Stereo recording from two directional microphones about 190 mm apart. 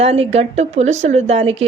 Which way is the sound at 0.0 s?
30° right (ahead or behind).